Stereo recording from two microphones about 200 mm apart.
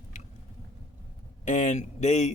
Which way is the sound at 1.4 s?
40° left (ahead or behind).